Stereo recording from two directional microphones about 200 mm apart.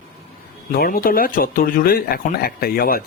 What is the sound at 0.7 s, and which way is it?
Speech, 45° left (ahead or behind).